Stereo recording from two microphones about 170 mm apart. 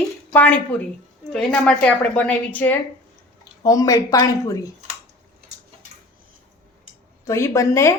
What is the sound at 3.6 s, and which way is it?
Speech, 20° left (ahead or behind).